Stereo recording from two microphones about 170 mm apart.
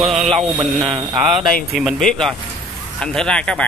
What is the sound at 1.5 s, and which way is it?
Speech, centre (ahead or behind).